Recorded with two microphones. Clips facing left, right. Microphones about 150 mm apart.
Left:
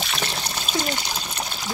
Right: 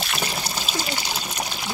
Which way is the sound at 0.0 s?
5° right (ahead or behind).